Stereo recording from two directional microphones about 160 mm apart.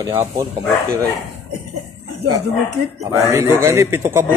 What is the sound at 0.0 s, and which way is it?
Speech, 20° right (ahead or behind).